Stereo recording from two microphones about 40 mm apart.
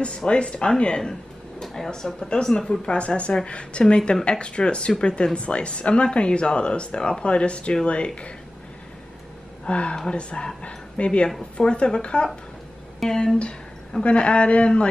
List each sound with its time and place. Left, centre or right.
0.3 s speech: left
1.6 s speech: centre
2.6 s speech: centre
3.2 s speech: left
9.7 s speech: left
13.0 s speech: centre
14.0 s speech: left